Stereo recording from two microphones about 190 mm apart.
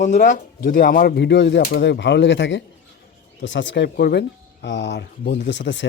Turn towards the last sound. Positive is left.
turn(degrees=70)  # may be behind; listen again after turning